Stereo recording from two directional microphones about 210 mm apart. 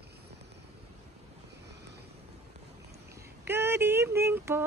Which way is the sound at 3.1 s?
10° right (ahead or behind).